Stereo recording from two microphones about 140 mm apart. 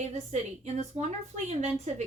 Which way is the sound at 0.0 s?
55° right (ahead or behind).